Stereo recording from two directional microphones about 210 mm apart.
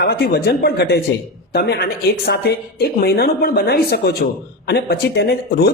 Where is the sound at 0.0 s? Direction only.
50° left (ahead or behind).